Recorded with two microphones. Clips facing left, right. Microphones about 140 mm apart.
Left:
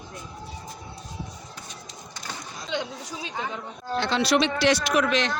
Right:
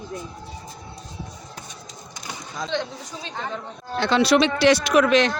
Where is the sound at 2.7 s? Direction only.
10° left (ahead or behind).